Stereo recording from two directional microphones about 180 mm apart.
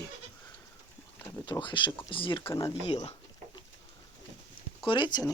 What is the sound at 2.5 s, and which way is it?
Speech, 15° left (ahead or behind).